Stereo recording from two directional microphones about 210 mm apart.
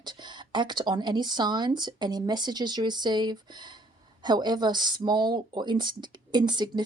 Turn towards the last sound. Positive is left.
turn(degrees=-20)  # may be behind; listen again after turning